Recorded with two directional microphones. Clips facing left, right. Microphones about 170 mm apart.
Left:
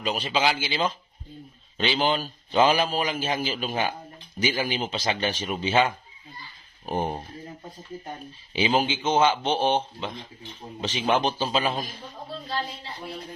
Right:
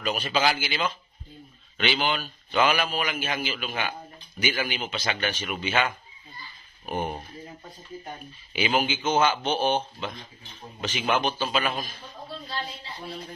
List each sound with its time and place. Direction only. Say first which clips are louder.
0.0 s a man's voice: even; 20° left (ahead or behind)
6.9 s a man's voice: left 2 dB; 30° left (ahead or behind)
8.5 s a man's voice: left 2 dB; 25° left (ahead or behind)